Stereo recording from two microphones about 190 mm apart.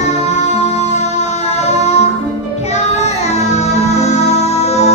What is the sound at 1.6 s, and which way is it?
Music, 35° left (ahead or behind).